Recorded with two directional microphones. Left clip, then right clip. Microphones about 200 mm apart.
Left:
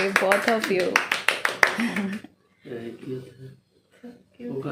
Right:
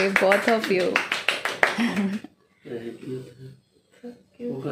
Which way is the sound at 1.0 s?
50° left (ahead or behind).